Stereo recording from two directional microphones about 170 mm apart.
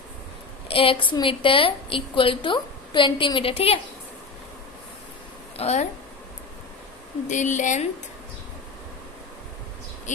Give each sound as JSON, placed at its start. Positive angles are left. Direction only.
{"t": 0.7, "sound": "a woman's voice", "side_deg": 35}
{"t": 5.5, "sound": "speech", "side_deg": 40}
{"t": 7.3, "sound": "a woman's voice", "side_deg": 45}